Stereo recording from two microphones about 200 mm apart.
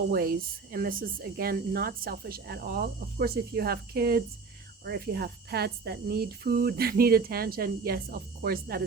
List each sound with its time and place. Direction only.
0.1 s speech: 50° right (ahead or behind)